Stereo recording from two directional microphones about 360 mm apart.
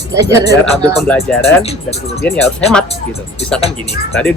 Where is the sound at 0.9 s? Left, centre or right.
Centre.